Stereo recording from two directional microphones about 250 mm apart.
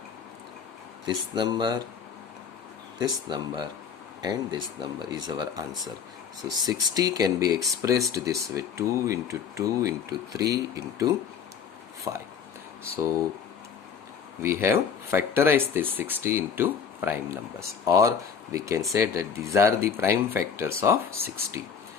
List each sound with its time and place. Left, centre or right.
1.0 s speech: centre
3.0 s speech: centre
14.4 s speech: centre